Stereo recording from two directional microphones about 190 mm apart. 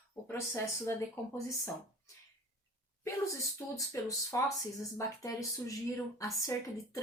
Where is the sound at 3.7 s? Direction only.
15° left (ahead or behind).